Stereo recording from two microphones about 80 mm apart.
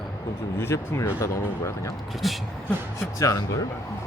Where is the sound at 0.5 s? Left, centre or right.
Left.